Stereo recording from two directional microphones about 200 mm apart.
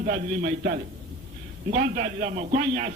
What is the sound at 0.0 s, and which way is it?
A man's voice, 40° right (ahead or behind).